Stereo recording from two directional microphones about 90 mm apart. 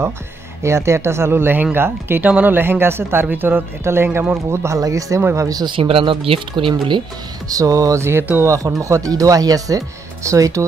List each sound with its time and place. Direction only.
0.6 s speech: 30° right (ahead or behind)
5.6 s speech: 70° right (ahead or behind)
7.4 s speech: 40° right (ahead or behind)